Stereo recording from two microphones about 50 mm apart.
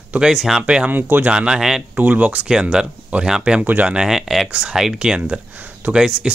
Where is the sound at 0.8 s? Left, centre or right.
Right.